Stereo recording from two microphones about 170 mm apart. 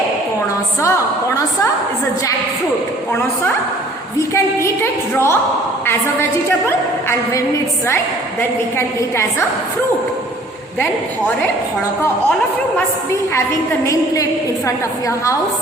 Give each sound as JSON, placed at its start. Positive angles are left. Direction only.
{"t": 0.8, "sound": "a sound", "side_deg": 20}
{"t": 4.2, "sound": "a woman's voice", "side_deg": 15}
{"t": 13.3, "sound": "a woman's voice", "side_deg": 15}